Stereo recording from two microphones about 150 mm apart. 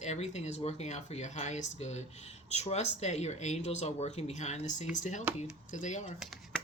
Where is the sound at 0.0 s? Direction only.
50° left (ahead or behind).